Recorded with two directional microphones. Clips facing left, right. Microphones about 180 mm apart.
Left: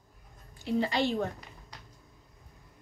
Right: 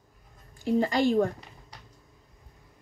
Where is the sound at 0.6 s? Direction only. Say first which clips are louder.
Right 5 dB; 45° right (ahead or behind).